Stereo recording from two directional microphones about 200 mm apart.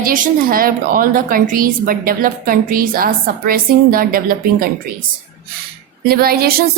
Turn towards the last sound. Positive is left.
turn(degrees=-50)  # may be behind; listen again after turning